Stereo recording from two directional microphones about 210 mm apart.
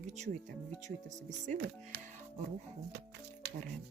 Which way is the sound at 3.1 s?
50° right (ahead or behind).